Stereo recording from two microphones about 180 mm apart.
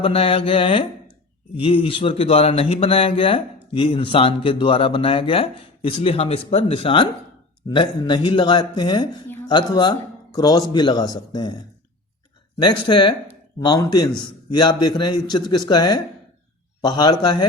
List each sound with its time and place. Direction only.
0.0 s a man's voice: 30° left (ahead or behind)
12.5 s a man's voice: 25° left (ahead or behind)